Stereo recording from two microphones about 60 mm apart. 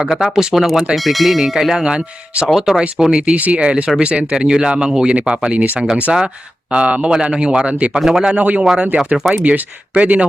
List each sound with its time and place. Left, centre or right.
0.2 s speech: centre
6.7 s speech: centre
7.9 s speech: centre
8.3 s speech: centre